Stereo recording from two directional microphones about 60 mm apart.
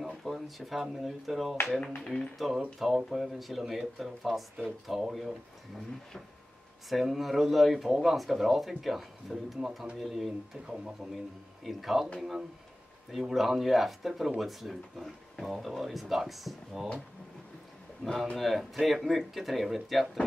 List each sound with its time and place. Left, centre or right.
0.1 s speech: centre
1.8 s speech: centre
2.0 s speech: centre
6.9 s speech: centre
18.4 s speech: centre